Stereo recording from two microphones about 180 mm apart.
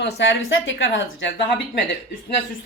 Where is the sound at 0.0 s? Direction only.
80° left.